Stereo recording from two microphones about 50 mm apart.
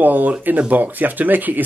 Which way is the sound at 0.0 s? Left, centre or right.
Right.